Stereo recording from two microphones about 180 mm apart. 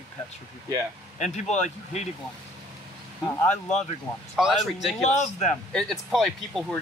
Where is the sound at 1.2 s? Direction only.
40° left (ahead or behind).